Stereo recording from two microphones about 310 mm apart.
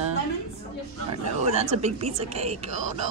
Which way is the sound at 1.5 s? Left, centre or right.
Right.